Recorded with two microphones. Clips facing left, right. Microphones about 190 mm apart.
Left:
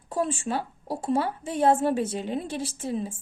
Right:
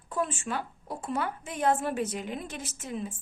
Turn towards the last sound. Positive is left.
turn(degrees=30)  # may be behind; listen again after turning